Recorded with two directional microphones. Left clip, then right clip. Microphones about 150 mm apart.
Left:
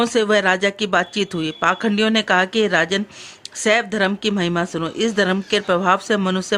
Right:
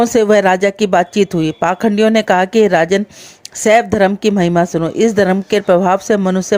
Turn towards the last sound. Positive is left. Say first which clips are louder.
# right 6 dB
turn(degrees=-45)  # may be behind; listen again after turning